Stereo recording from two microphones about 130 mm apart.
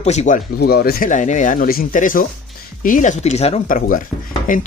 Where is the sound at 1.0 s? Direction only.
75° left (ahead or behind); by 3.6 s 55° left (ahead or behind).